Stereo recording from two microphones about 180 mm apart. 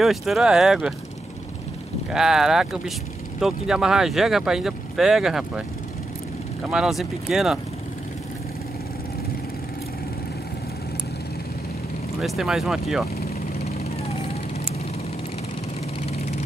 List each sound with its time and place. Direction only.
0.0 s speech: centre (ahead or behind)
2.0 s speech: 5° right (ahead or behind)
6.7 s speech: centre (ahead or behind)
12.2 s speech: centre (ahead or behind)
13.7 s vehicle: 35° left (ahead or behind)
16.0 s vehicle: 40° left (ahead or behind)